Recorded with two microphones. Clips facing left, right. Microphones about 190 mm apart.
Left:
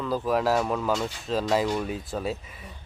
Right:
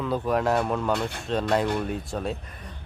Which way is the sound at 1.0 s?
60° right (ahead or behind).